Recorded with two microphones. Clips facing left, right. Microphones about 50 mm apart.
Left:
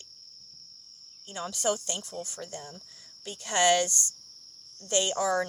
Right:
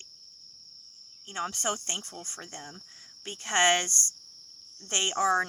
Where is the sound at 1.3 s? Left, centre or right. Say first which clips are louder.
Left 2 dB; right.